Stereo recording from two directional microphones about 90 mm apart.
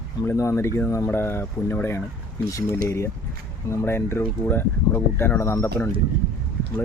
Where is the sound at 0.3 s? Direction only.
30° left (ahead or behind).